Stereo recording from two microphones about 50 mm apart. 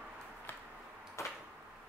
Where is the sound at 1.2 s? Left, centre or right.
Left.